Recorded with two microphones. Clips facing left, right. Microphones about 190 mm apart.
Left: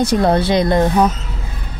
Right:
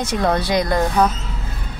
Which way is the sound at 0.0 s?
35° left (ahead or behind).